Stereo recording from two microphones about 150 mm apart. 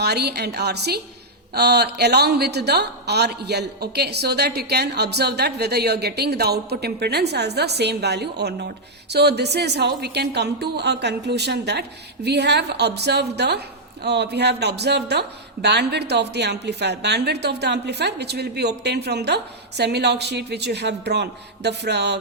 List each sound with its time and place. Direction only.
0.0 s a woman's voice: 90° right